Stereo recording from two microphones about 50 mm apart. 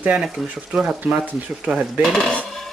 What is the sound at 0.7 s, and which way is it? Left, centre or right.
Speech, centre.